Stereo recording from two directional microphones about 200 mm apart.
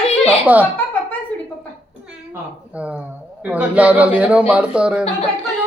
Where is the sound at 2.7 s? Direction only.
5° right (ahead or behind).